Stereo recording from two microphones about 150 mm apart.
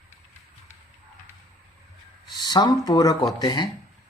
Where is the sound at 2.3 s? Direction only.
30° left (ahead or behind).